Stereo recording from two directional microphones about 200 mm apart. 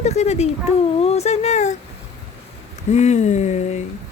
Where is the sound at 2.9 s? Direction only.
35° left (ahead or behind).